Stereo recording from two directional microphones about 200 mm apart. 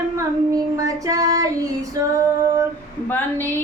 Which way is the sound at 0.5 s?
15° right (ahead or behind).